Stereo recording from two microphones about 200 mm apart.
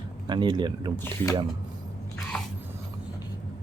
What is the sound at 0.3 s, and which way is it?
Speech, 20° right (ahead or behind).